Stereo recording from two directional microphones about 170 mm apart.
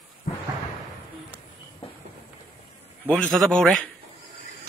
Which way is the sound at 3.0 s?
5° left (ahead or behind).